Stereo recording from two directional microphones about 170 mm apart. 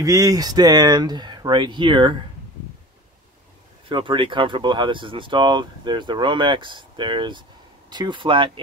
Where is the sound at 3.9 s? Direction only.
30° right (ahead or behind).